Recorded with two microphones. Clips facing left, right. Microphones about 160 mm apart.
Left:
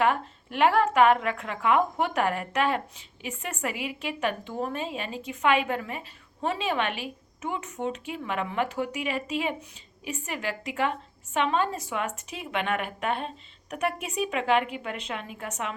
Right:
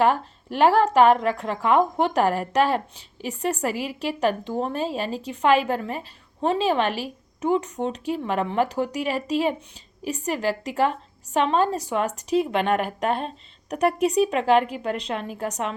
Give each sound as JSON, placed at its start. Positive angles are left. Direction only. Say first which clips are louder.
{"t": 0.0, "sound": "a woman's voice", "louder": "right 4 dB", "side_deg": -35}